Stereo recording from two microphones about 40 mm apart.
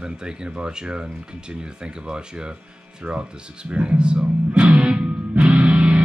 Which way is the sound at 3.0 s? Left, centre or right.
Right.